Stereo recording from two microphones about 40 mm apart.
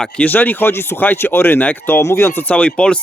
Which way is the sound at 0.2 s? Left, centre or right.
Left.